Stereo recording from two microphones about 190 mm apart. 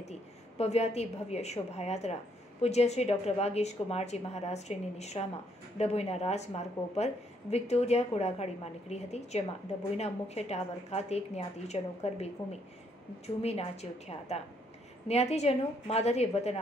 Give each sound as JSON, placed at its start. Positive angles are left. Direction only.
{"t": 0.0, "sound": "a woman's voice", "side_deg": 35}
{"t": 13.4, "sound": "a woman's voice", "side_deg": 35}